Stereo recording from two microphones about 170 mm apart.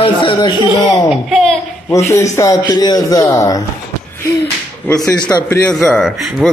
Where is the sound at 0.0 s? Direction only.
30° left (ahead or behind).